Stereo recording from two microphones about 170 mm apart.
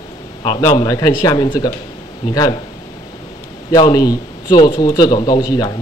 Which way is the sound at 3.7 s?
25° left (ahead or behind).